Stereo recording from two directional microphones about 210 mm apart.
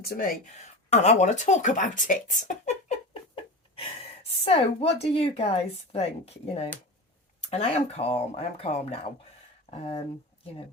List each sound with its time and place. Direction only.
0.0 s speech: 45° left (ahead or behind)
0.9 s speech: 30° left (ahead or behind)
3.3 s a sound: 25° left (ahead or behind)
4.4 s speech: 30° left (ahead or behind)